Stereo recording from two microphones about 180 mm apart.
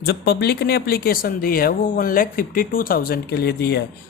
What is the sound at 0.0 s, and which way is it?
Speech, 65° left (ahead or behind).